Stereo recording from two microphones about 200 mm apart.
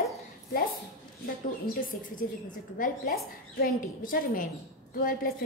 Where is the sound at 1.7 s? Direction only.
45° left (ahead or behind).